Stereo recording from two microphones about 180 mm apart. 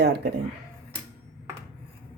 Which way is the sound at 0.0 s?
65° right (ahead or behind).